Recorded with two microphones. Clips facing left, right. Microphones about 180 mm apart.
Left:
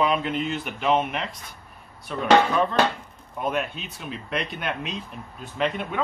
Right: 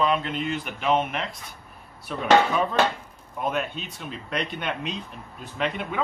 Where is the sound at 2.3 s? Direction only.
5° right (ahead or behind).